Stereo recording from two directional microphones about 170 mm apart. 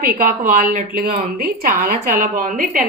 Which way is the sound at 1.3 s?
60° right (ahead or behind).